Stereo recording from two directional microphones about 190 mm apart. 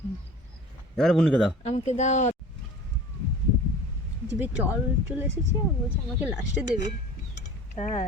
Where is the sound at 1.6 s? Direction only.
35° left (ahead or behind).